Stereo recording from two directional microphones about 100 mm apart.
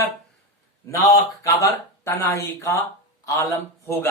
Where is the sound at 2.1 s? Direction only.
30° left (ahead or behind).